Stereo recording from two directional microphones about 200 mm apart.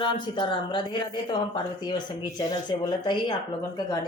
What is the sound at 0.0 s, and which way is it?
Speech, 25° left (ahead or behind).